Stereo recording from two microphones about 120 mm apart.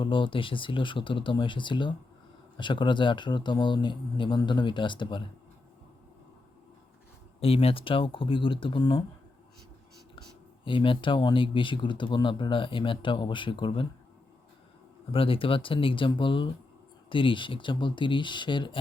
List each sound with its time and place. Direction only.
0.0 s a man's voice: 45° left (ahead or behind)
7.3 s speech: 55° left (ahead or behind)
10.2 s speech: 45° left (ahead or behind)
15.1 s speech: 50° left (ahead or behind)